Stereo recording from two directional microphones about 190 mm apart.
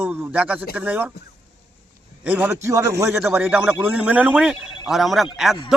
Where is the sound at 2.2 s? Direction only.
10° right (ahead or behind).